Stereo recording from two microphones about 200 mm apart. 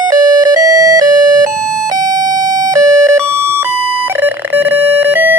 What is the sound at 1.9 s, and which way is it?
Siren, 20° right (ahead or behind).